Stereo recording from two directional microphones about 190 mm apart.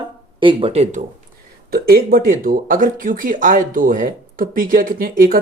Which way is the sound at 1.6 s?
55° right (ahead or behind).